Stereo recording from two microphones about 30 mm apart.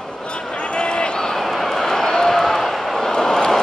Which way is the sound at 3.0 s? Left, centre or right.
Centre.